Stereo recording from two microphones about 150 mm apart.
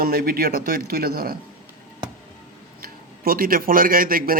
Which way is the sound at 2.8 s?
75° right (ahead or behind).